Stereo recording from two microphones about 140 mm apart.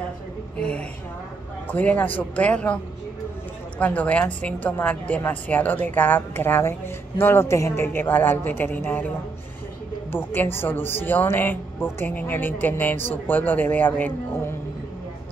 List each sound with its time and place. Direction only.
0.6 s speech: 5° left (ahead or behind)
10.1 s speech: 15° left (ahead or behind)